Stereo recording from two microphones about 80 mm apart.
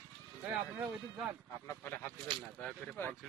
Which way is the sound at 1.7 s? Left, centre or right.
Left.